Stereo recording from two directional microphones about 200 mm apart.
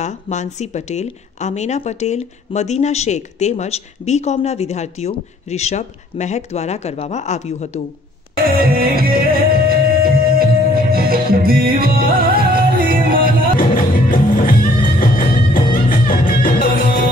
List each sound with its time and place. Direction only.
0.0 s speech: 35° left (ahead or behind)
8.5 s music: 45° right (ahead or behind)
13.6 s music: 45° left (ahead or behind)